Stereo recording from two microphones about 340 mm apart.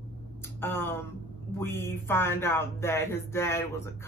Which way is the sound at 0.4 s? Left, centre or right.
Centre.